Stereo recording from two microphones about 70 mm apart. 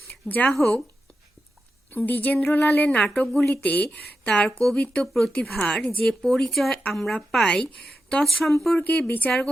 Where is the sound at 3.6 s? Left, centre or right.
Left; by 5.3 s centre.